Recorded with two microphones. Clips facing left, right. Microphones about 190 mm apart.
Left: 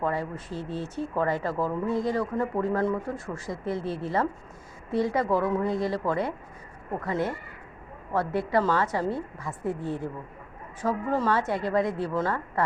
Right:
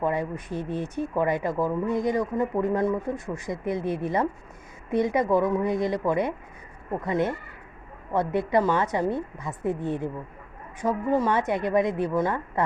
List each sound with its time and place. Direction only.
0.0 s a woman's voice: 20° right (ahead or behind)